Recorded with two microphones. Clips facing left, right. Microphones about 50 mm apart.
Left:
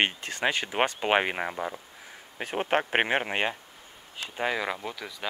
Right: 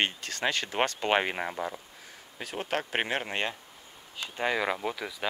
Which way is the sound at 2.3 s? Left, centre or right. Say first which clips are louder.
Left 5 dB; left.